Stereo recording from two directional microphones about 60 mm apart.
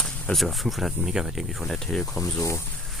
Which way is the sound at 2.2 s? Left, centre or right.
Left.